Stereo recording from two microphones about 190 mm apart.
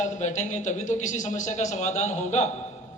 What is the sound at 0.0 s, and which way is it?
A man's voice, 40° left (ahead or behind).